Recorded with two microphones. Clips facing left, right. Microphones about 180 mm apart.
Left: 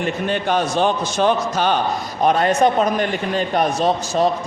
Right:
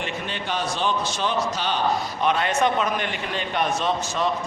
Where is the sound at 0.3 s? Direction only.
50° left (ahead or behind).